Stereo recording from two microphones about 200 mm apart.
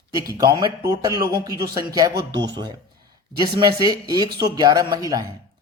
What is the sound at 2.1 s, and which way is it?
Speech, 60° right (ahead or behind).